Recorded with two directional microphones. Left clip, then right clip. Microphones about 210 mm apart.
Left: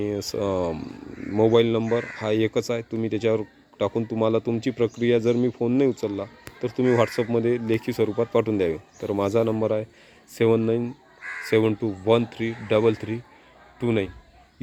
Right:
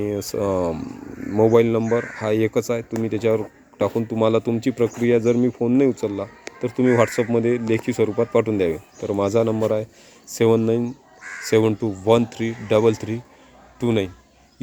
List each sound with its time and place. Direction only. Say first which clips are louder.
0.0 s speech: right 3 dB; centre (ahead or behind)